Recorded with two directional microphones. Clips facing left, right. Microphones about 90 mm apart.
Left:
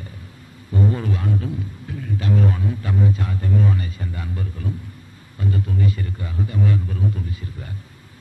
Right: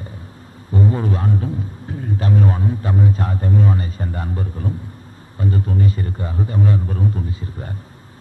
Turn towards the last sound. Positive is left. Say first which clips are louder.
# right 4 dB
turn(degrees=-35)  # may be behind; listen again after turning